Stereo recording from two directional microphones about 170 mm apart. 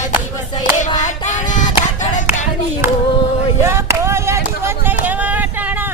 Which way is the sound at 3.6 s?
15° right (ahead or behind).